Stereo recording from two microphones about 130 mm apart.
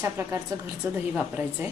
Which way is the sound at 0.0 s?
20° right (ahead or behind).